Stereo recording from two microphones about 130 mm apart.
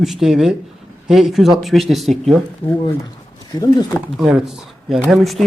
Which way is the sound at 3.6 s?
25° left (ahead or behind).